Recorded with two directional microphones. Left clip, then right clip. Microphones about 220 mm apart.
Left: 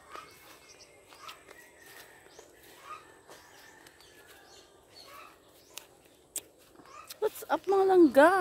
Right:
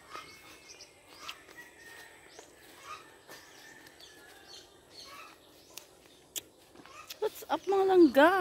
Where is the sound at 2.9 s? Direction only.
45° right (ahead or behind).